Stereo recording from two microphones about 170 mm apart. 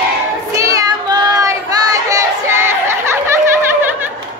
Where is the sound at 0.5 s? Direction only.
20° right (ahead or behind).